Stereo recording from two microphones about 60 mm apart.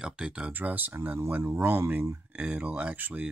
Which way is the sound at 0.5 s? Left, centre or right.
Right.